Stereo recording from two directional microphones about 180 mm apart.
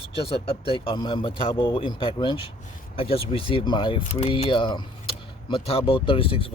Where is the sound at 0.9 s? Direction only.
25° left (ahead or behind).